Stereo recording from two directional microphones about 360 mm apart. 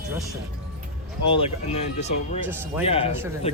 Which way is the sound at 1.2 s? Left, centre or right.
Centre.